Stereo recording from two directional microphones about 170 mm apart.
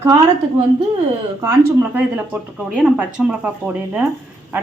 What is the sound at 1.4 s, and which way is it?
A woman's voice, 15° right (ahead or behind).